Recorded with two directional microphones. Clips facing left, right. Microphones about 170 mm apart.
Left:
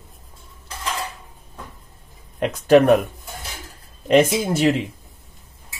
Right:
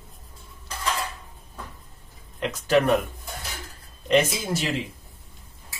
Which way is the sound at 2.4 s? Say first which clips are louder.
Left 6 dB; 55° left (ahead or behind).